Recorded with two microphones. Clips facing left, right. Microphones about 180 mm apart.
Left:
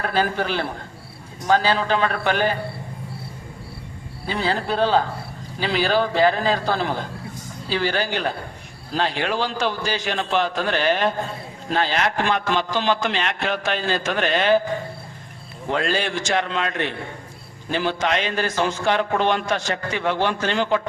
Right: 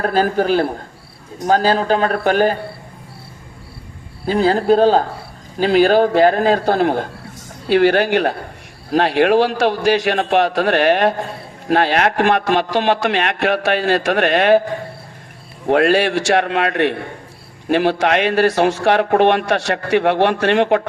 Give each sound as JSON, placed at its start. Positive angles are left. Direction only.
{"t": 0.0, "sound": "a man's voice", "side_deg": -40}
{"t": 4.3, "sound": "a man's voice", "side_deg": -45}
{"t": 15.6, "sound": "a man's voice", "side_deg": -70}